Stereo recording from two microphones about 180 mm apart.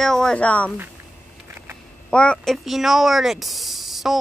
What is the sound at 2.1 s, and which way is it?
Speech, 5° left (ahead or behind).